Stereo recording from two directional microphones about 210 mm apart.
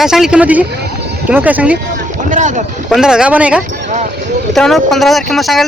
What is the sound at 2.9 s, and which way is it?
Speech, 5° right (ahead or behind).